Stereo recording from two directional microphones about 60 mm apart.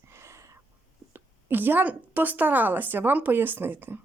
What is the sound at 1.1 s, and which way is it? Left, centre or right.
A woman's voice, right.